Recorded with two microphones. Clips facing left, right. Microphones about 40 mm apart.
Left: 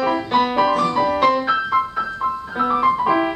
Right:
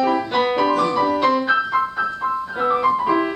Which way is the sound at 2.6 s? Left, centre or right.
Centre.